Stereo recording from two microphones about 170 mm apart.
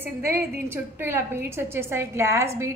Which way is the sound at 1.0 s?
15° right (ahead or behind).